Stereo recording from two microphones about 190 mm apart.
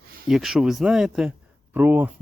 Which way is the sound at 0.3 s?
Centre (ahead or behind).